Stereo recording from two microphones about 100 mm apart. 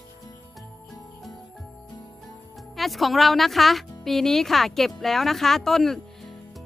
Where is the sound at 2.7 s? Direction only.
Centre (ahead or behind).